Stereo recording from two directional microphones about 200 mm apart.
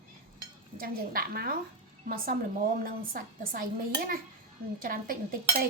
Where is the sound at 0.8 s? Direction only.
45° right (ahead or behind).